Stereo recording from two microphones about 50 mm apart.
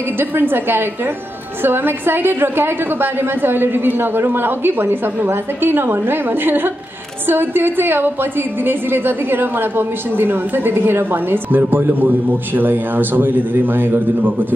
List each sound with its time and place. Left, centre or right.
0.2 s a woman's voice: right